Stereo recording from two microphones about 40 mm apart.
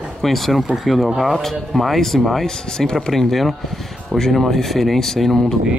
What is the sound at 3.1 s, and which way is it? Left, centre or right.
Speech, centre.